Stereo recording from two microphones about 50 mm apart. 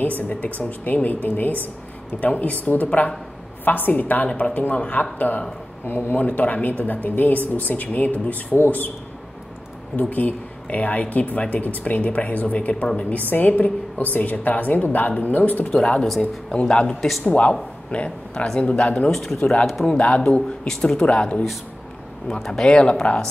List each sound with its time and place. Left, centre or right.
0.0 s a woman's voice: left
9.9 s a woman's voice: left
15.7 s speech: centre
17.2 s speech: left
19.0 s speech: centre
19.9 s speech: left
20.6 s speech: centre
22.3 s speech: centre